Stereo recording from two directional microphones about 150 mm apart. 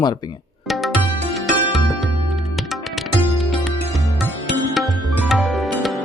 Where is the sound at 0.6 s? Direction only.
Centre (ahead or behind).